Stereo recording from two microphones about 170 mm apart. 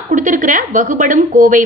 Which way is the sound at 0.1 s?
50° right (ahead or behind).